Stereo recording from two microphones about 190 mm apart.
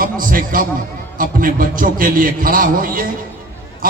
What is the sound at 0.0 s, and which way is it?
A man's voice, 45° right (ahead or behind).